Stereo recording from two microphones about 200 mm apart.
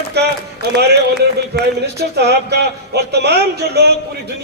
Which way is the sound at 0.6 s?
50° right (ahead or behind).